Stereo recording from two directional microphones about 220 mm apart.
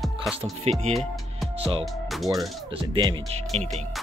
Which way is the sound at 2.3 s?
20° right (ahead or behind).